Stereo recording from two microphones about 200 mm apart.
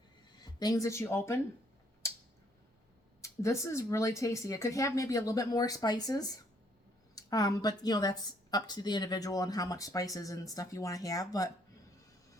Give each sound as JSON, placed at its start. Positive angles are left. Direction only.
{"t": 0.4, "sound": "speech", "side_deg": 20}
{"t": 3.2, "sound": "speech", "side_deg": 15}